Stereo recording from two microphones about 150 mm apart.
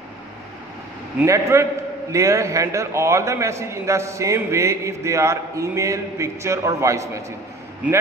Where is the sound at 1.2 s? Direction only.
20° right (ahead or behind).